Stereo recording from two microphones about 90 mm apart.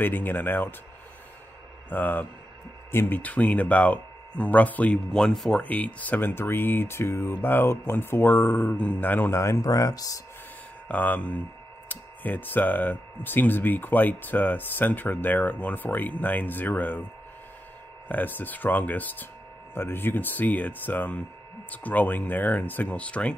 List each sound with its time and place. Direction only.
0.0 s speech: 20° left (ahead or behind)
1.9 s speech: 20° left (ahead or behind)
5.1 s speech: 5° left (ahead or behind)
5.6 s speech: 15° left (ahead or behind); by 10.2 s 40° left (ahead or behind)
10.9 s speech: 15° left (ahead or behind)
18.0 s speech: 20° left (ahead or behind)